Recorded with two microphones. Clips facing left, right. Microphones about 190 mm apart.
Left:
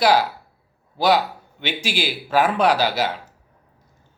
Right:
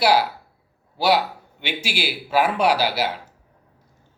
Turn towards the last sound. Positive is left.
turn(degrees=-10)  # may be behind; listen again after turning